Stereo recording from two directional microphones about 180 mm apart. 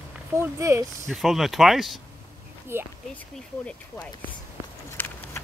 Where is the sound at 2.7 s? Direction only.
15° right (ahead or behind).